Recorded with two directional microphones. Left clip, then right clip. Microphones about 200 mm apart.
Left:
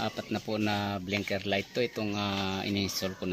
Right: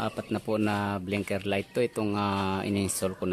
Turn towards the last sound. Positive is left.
turn(degrees=-20)  # may be behind; listen again after turning